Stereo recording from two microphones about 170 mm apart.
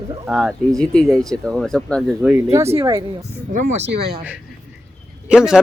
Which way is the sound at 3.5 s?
45° right (ahead or behind).